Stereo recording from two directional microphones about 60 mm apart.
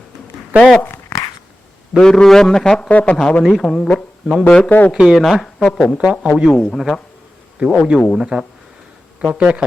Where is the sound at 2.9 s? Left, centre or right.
Left.